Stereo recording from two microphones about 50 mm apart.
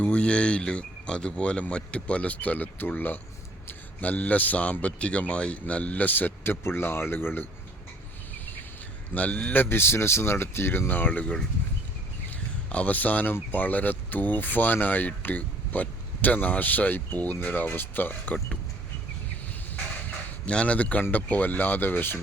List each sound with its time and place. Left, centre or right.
0.0 s speech: left
9.1 s speech: left
9.6 s speech: left
12.7 s speech: left
19.7 s a sound: left
21.1 s speech: left